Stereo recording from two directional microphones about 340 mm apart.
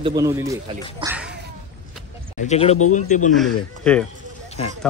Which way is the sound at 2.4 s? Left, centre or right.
Centre.